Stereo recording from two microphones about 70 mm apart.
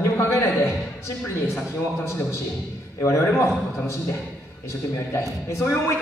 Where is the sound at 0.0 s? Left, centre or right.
Left.